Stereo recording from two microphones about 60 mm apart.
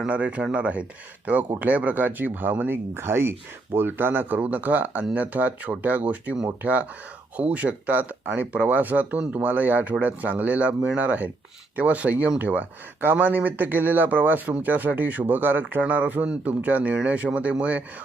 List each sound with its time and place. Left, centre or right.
0.1 s speech: right